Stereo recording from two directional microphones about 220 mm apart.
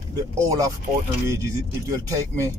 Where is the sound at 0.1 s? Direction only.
15° right (ahead or behind).